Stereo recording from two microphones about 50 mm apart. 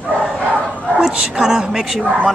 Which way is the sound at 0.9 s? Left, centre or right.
Centre.